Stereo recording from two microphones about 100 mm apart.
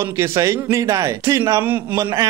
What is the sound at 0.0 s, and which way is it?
Speech, 30° right (ahead or behind).